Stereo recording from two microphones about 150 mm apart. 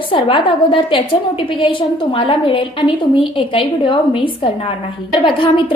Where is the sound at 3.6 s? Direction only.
35° left (ahead or behind).